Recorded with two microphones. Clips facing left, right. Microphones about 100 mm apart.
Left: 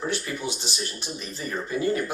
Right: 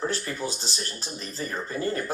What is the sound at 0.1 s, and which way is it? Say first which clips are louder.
Speech: left 1 dB; 35° right (ahead or behind).